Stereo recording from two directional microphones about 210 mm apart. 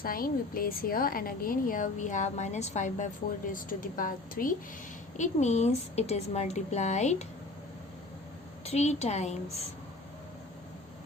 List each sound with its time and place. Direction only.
0.0 s a woman's voice: 45° left (ahead or behind)
8.6 s a woman's voice: 30° left (ahead or behind)